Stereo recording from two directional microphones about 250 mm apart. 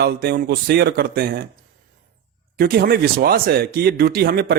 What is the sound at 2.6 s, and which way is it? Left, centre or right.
Speech, right.